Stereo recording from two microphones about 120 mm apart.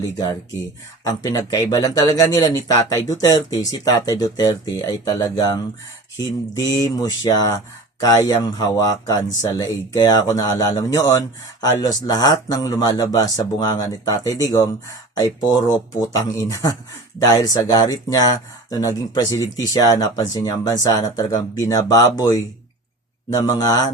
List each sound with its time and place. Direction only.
0.0 s speech: 30° left (ahead or behind)